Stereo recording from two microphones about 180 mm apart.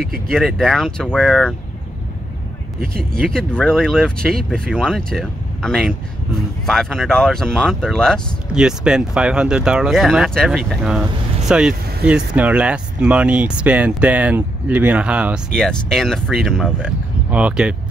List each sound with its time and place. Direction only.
0.3 s speech: centre (ahead or behind)
3.0 s speech: centre (ahead or behind)
17.3 s speech: 10° right (ahead or behind)